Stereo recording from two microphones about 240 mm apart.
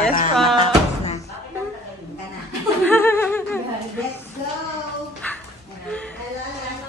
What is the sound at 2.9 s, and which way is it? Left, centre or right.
Laughter, centre.